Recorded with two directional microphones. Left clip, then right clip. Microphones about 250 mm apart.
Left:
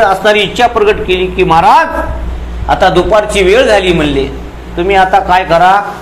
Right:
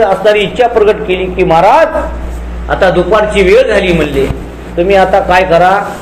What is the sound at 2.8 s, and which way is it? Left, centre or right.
A man's voice, left.